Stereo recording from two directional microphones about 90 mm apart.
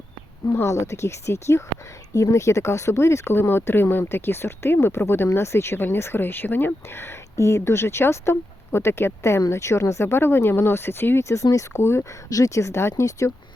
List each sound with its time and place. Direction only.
0.5 s speech: 30° left (ahead or behind)
12.3 s speech: 40° left (ahead or behind)